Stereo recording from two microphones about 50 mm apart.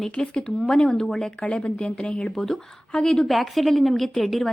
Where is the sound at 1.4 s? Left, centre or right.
Left.